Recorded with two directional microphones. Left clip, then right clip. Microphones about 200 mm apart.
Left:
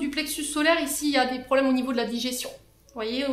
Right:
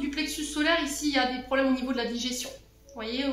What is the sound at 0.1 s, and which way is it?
A woman's voice, 55° left (ahead or behind).